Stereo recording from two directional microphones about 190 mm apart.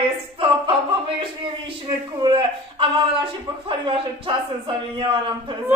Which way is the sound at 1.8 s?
20° right (ahead or behind).